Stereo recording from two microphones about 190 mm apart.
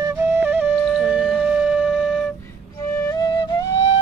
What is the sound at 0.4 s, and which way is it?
Flute, 10° right (ahead or behind).